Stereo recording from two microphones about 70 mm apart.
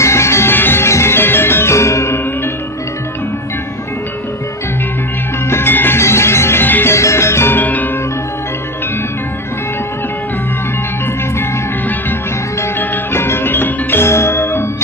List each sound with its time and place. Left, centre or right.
0.0 s music: left
5.5 s music: left
6.9 s music: left
12.8 s music: left